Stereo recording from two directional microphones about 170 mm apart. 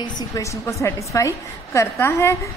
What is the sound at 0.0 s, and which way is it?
A woman's voice, 20° left (ahead or behind).